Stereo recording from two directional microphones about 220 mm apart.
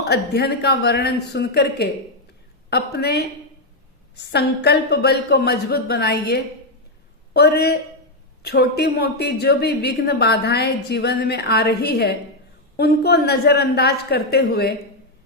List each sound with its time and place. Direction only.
0.0 s a woman's voice: 45° left (ahead or behind)